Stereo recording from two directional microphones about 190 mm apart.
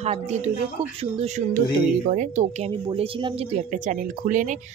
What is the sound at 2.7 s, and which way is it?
Speech, 30° right (ahead or behind).